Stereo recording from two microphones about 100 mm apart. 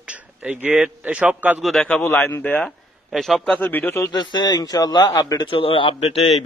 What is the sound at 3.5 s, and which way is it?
Speech, 20° left (ahead or behind).